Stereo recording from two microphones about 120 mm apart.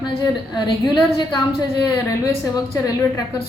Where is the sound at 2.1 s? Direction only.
25° left (ahead or behind).